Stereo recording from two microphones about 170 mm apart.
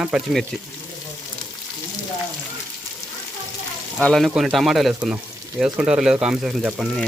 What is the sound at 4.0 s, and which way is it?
Speech, centre (ahead or behind).